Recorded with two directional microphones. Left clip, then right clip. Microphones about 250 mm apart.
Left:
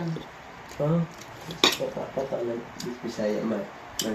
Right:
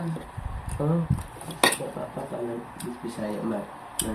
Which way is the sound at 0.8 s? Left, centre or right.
Right.